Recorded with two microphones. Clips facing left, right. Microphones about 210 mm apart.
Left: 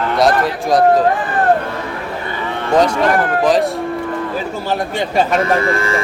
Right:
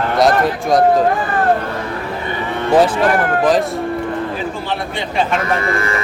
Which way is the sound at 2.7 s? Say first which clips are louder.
Even; 5° right (ahead or behind).